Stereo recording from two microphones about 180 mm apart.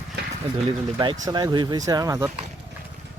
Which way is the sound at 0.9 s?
25° right (ahead or behind).